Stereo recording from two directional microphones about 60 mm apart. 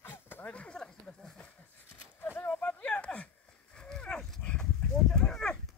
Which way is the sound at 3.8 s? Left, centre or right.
Centre.